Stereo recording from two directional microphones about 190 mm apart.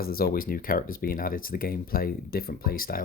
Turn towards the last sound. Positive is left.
turn(degrees=50)  # may be behind; listen again after turning